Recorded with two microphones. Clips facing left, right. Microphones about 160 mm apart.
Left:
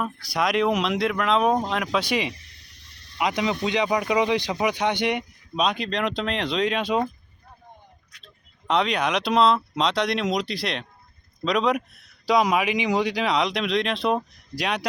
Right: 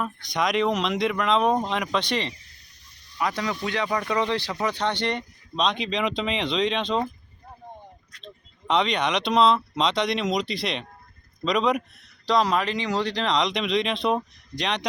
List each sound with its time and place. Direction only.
0.0 s speech: 5° left (ahead or behind)
2.3 s snake: 75° left (ahead or behind)
3.2 s speech: 20° left (ahead or behind)
8.6 s speech: centre (ahead or behind)
12.2 s speech: 10° left (ahead or behind)